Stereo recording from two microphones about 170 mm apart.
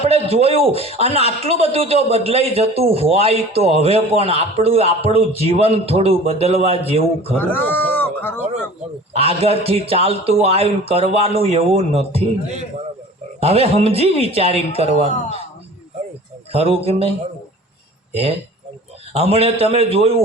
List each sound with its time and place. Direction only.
0.0 s a man's voice: 35° right (ahead or behind)
7.3 s speech: 10° left (ahead or behind)
9.1 s a man's voice: 35° right (ahead or behind)
16.5 s a man's voice: 35° right (ahead or behind)